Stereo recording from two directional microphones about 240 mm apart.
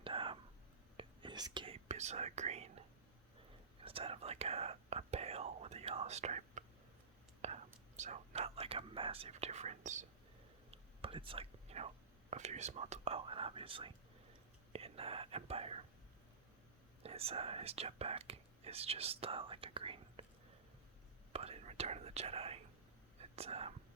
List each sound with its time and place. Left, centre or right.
0.0 s whispering: right
3.8 s whispering: right
12.3 s speech: right
17.0 s speech: right
21.3 s whispering: right